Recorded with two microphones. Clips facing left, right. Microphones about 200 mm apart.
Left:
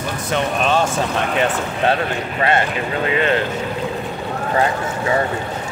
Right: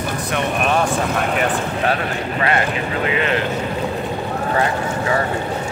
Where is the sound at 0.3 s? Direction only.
25° left (ahead or behind).